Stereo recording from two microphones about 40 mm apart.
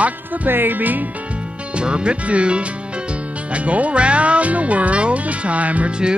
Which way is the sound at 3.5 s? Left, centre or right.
Right.